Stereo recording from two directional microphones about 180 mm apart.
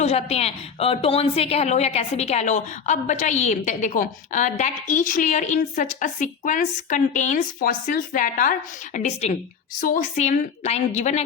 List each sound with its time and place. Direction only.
0.0 s a woman's voice: 35° left (ahead or behind)